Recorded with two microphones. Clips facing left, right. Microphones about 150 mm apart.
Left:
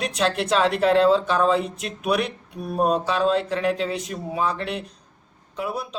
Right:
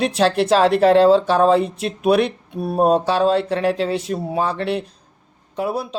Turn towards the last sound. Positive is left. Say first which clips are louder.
# right 6 dB
turn(degrees=-35)  # may be behind; listen again after turning